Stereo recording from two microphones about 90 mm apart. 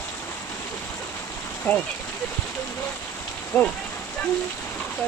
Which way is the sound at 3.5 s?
15° left (ahead or behind).